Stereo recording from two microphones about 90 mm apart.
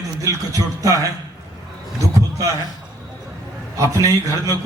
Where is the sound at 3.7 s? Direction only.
40° right (ahead or behind).